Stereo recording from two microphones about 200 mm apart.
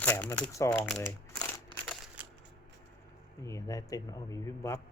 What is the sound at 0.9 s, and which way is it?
Crumpling, 10° left (ahead or behind).